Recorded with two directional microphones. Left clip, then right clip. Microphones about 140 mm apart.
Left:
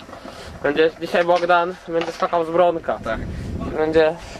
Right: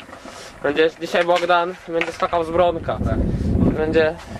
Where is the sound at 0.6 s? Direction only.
20° right (ahead or behind).